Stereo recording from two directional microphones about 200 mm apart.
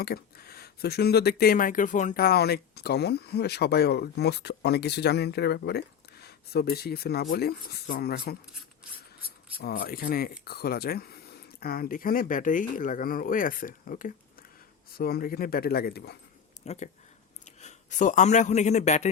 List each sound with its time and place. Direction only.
0.0 s speech: 50° left (ahead or behind)
9.6 s speech: 50° left (ahead or behind)
16.6 s a man's voice: 35° left (ahead or behind)